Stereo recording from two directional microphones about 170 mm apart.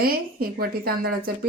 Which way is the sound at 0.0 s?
60° right (ahead or behind).